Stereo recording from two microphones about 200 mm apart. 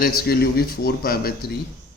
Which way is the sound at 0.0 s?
50° left (ahead or behind).